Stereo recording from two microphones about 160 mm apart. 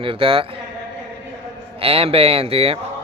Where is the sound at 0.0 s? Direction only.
35° right (ahead or behind).